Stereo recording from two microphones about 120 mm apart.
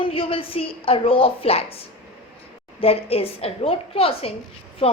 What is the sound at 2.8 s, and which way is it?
A woman's voice, 55° left (ahead or behind).